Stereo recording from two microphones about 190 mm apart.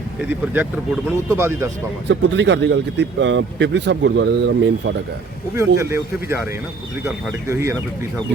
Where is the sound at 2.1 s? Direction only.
70° right (ahead or behind).